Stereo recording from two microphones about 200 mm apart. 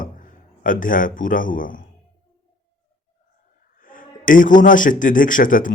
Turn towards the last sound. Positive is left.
turn(degrees=40)  # may be behind; listen again after turning